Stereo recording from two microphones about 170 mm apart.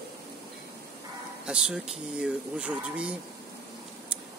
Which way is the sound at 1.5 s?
5° right (ahead or behind).